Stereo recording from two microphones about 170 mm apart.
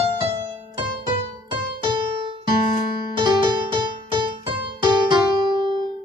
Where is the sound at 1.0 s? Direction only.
25° right (ahead or behind).